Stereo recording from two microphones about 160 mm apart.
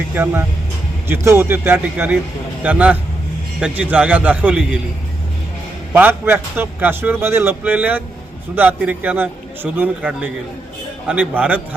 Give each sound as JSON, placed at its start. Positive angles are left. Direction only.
{"t": 0.1, "sound": "a man's voice", "side_deg": -15}
{"t": 5.9, "sound": "a man's voice", "side_deg": -15}